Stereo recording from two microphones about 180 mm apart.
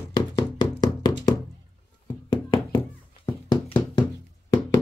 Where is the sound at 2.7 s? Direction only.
15° left (ahead or behind).